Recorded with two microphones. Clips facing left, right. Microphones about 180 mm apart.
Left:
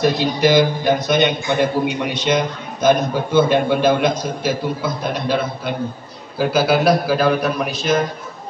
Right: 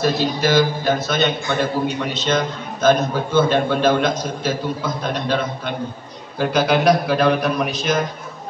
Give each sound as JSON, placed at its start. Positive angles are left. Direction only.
{"t": 0.0, "sound": "a man's voice", "side_deg": 15}